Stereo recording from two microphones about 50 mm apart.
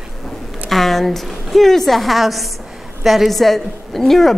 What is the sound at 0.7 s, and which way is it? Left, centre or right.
A woman's voice, centre.